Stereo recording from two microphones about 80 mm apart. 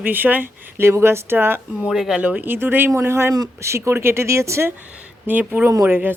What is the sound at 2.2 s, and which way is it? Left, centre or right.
Speech, right.